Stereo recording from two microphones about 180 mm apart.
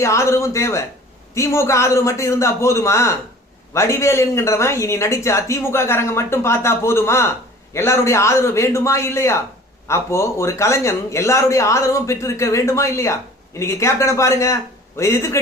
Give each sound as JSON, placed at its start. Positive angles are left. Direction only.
{"t": 0.0, "sound": "speech", "side_deg": 15}